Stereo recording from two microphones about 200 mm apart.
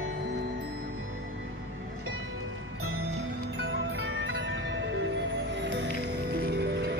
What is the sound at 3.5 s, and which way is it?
Music, 70° right (ahead or behind).